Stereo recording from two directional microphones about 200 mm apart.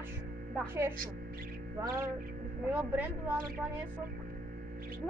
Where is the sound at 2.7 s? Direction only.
10° right (ahead or behind).